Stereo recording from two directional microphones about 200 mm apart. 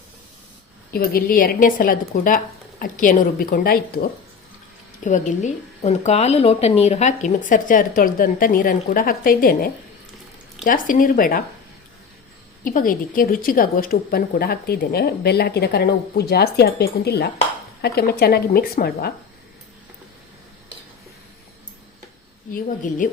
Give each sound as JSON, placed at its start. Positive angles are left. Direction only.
{"t": 0.9, "sound": "a woman's voice", "side_deg": 45}
{"t": 5.0, "sound": "speech", "side_deg": 35}
{"t": 10.7, "sound": "a woman's voice", "side_deg": 45}
{"t": 12.6, "sound": "a woman's voice", "side_deg": 45}
{"t": 22.5, "sound": "speech", "side_deg": 40}